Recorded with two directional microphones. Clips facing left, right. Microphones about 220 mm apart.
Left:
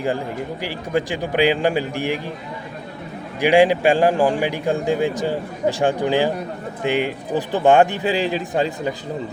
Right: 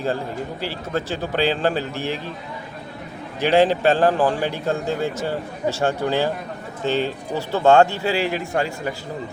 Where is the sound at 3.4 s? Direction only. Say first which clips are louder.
Left 2 dB; 10° left (ahead or behind).